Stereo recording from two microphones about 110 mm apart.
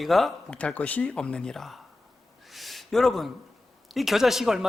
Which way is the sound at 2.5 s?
Centre (ahead or behind).